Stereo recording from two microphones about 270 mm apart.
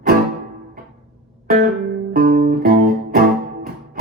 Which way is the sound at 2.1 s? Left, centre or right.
Right.